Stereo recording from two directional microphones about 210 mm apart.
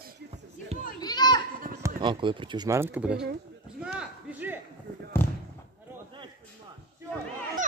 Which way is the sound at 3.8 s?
5° right (ahead or behind).